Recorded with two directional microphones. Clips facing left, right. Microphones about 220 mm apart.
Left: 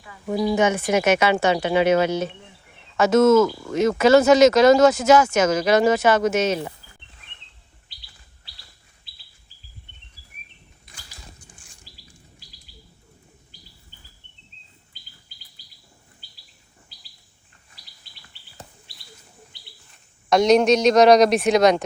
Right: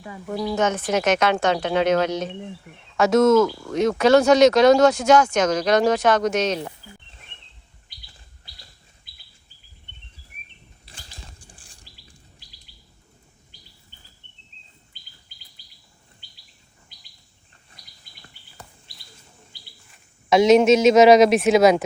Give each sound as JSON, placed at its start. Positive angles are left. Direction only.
{"t": 0.3, "sound": "speech", "side_deg": 10}
{"t": 9.1, "sound": "chirp", "side_deg": 30}
{"t": 10.8, "sound": "a sound", "side_deg": -30}
{"t": 19.9, "sound": "a man's voice", "side_deg": 0}